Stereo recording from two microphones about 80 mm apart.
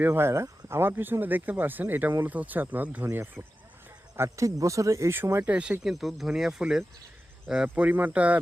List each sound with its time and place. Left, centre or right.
0.0 s speech: right
4.2 s speech: right
5.1 s speech: right
5.8 s speech: centre